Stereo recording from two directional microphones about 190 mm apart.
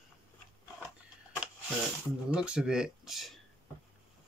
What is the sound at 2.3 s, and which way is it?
Speech, 5° right (ahead or behind).